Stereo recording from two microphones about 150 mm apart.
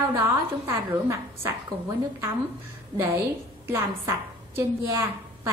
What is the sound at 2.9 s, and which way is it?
A woman's voice, 15° right (ahead or behind).